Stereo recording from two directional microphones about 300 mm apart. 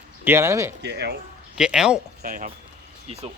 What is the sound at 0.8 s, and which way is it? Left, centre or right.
Speech, right.